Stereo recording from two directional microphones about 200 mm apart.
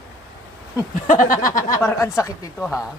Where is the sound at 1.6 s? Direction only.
15° left (ahead or behind).